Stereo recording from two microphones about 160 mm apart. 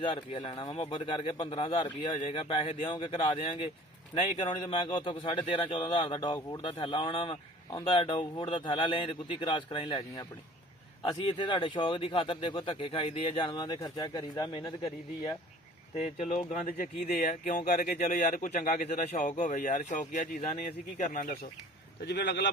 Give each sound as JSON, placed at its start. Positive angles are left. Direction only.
{"t": 0.0, "sound": "speech", "side_deg": 30}
{"t": 11.3, "sound": "speech", "side_deg": 30}
{"t": 16.0, "sound": "a man's voice", "side_deg": 45}
{"t": 22.0, "sound": "speech", "side_deg": 90}